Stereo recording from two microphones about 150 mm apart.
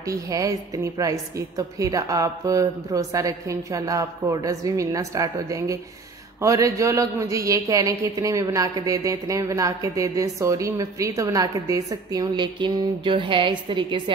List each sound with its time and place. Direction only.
0.0 s a woman's voice: 25° right (ahead or behind)